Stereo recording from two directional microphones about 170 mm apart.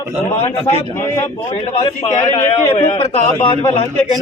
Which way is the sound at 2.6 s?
30° left (ahead or behind).